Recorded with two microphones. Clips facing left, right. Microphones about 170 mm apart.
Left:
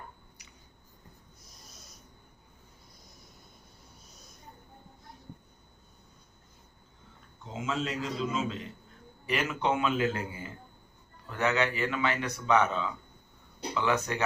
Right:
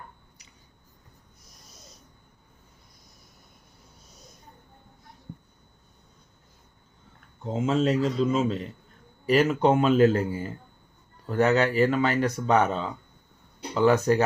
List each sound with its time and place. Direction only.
7.4 s speech: 45° right (ahead or behind)